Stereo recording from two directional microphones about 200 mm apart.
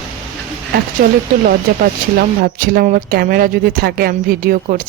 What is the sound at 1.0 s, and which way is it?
Speech, 45° right (ahead or behind).